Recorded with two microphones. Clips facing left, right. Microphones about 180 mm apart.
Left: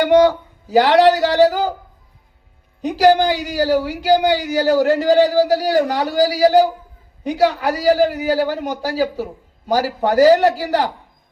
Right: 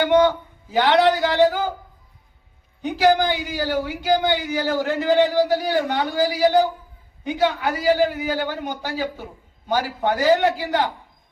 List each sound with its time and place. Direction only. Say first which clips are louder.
0.0 s a man's voice: left 4 dB; 40° left (ahead or behind)
2.8 s a man's voice: left 4 dB; 40° left (ahead or behind)